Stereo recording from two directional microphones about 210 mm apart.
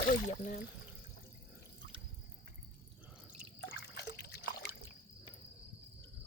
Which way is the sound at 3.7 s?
50° left (ahead or behind).